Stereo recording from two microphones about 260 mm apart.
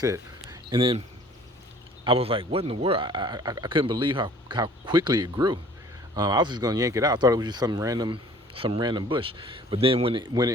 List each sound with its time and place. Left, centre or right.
0.0 s speech: centre
2.0 s speech: right